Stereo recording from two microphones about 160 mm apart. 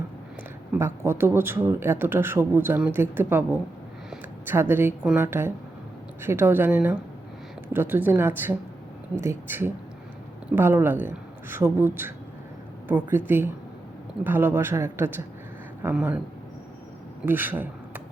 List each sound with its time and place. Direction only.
0.7 s speech: 15° right (ahead or behind)
17.2 s speech: 10° right (ahead or behind)